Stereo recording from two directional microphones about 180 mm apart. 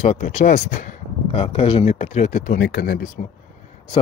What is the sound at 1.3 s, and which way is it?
Speech, 30° left (ahead or behind).